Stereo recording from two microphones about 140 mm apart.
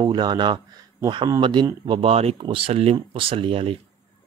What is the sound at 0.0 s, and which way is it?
Speech, 30° right (ahead or behind).